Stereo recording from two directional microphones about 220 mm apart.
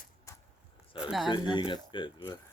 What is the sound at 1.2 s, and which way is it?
Speech, 20° left (ahead or behind).